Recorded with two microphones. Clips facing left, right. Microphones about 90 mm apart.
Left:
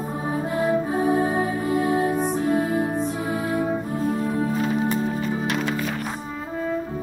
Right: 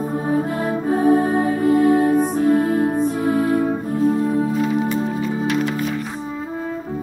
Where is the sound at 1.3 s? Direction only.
50° right (ahead or behind).